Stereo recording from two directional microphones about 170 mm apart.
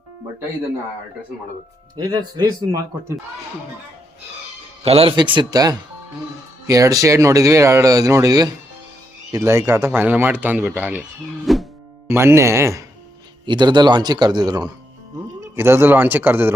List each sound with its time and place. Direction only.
2.0 s speech: 25° right (ahead or behind)
4.8 s speech: 35° right (ahead or behind); by 11.0 s 10° right (ahead or behind)
11.4 s music: centre (ahead or behind)
12.0 s speech: 15° right (ahead or behind)
13.4 s speech: 25° right (ahead or behind)